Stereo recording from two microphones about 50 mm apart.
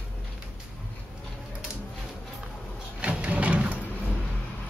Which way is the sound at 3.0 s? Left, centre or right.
Right.